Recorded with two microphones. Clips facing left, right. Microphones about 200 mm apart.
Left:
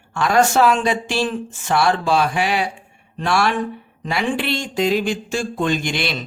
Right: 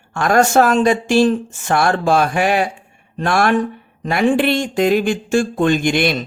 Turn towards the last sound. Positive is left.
turn(degrees=-50)  # may be behind; listen again after turning